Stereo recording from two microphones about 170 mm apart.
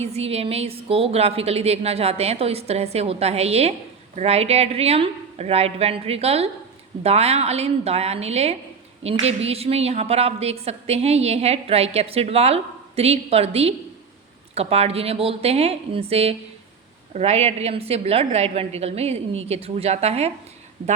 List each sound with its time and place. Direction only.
0.0 s a woman's voice: 40° right (ahead or behind)